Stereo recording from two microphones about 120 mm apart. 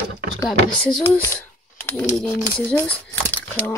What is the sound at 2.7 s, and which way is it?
Speech, 15° left (ahead or behind).